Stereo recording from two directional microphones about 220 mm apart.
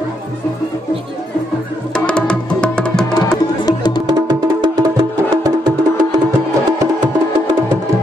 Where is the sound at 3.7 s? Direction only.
20° left (ahead or behind).